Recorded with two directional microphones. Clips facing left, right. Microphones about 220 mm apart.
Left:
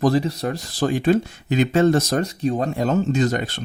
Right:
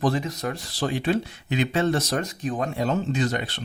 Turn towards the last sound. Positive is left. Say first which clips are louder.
# left 5 dB
turn(degrees=45)  # may be behind; listen again after turning